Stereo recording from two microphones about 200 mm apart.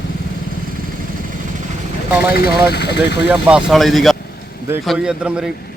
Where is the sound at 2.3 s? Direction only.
50° left (ahead or behind).